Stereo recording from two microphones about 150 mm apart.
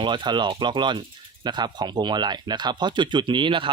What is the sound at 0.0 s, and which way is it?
Speech, 30° right (ahead or behind).